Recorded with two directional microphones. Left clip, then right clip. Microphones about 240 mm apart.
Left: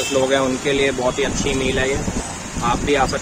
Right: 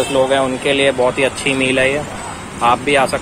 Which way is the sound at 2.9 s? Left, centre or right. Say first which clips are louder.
Right 4 dB; centre.